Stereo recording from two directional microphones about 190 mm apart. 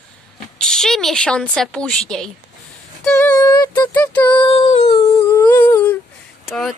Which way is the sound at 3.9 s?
5° left (ahead or behind).